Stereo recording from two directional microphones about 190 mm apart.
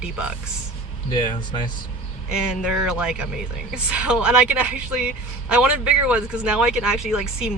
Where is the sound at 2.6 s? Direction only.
5° right (ahead or behind).